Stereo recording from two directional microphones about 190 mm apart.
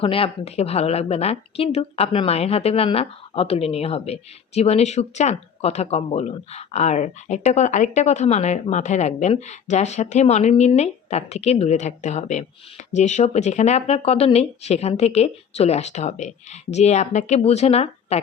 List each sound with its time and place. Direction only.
0.0 s a woman's voice: 30° left (ahead or behind)